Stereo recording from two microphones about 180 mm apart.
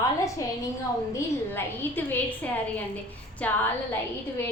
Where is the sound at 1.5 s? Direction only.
10° left (ahead or behind).